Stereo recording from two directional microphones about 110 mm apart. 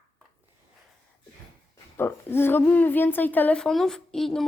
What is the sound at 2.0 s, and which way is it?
A woman's voice, 20° left (ahead or behind).